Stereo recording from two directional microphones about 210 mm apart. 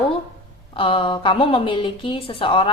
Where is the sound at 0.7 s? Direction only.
25° left (ahead or behind).